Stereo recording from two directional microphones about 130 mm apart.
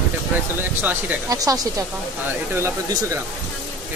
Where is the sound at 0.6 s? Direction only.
15° right (ahead or behind).